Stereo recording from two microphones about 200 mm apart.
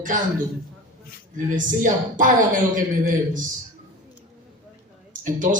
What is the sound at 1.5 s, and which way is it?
A man's voice, 40° right (ahead or behind).